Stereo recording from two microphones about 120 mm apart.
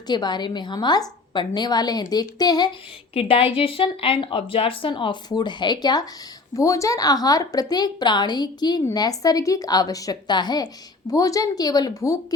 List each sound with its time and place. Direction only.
0.1 s a woman's voice: 35° left (ahead or behind)
3.2 s a woman's voice: 50° left (ahead or behind); by 12.2 s 30° left (ahead or behind)